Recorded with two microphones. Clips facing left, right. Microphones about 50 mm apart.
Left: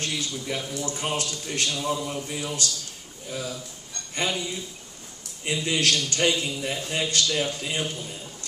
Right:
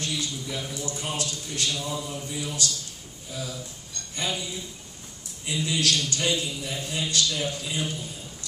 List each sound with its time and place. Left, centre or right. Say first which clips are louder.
0.0 s a man's voice: left 1 dB; left
4.1 s a man's voice: left 3 dB; left
5.4 s a man's voice: left 2 dB; left